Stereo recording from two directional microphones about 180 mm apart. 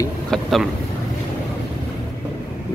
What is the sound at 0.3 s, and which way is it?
Speech, centre (ahead or behind).